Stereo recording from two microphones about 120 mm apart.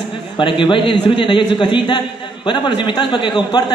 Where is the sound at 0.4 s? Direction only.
45° left (ahead or behind).